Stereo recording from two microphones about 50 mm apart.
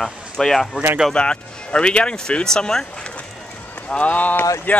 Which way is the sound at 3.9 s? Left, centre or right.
Left.